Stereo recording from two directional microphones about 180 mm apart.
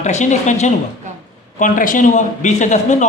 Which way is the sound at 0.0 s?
40° left (ahead or behind).